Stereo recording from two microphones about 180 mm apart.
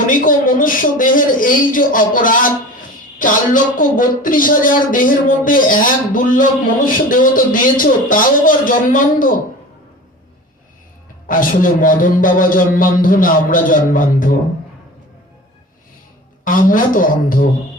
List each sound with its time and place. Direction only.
0.1 s speech: 50° left (ahead or behind)
11.3 s speech: 50° left (ahead or behind)
16.4 s speech: 50° left (ahead or behind)